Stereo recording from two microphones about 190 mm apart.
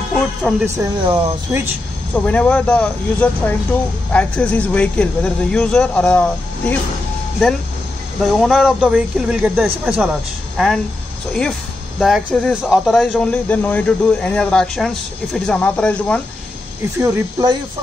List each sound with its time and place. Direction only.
0.4 s speech: centre (ahead or behind)
0.7 s speech: 25° right (ahead or behind)
2.1 s speech: 5° left (ahead or behind)
8.2 s speech: centre (ahead or behind)
12.0 s speech: centre (ahead or behind)
17.0 s speech: 15° right (ahead or behind)